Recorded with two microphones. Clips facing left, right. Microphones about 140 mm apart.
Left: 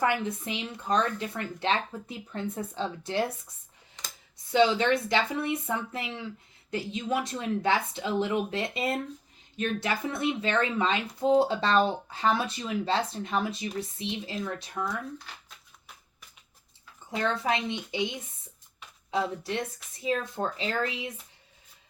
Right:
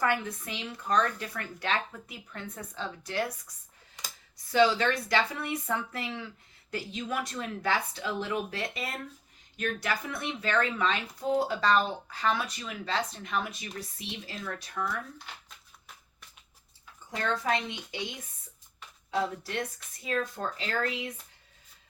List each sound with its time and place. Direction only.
0.0 s speech: 25° left (ahead or behind)
4.0 s computer keyboard: 10° right (ahead or behind)
4.5 s speech: 20° left (ahead or behind)
17.3 s speech: 25° left (ahead or behind)
19.1 s speech: 20° left (ahead or behind)